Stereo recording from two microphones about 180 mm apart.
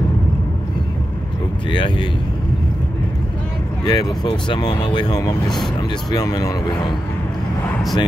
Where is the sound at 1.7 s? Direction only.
25° left (ahead or behind).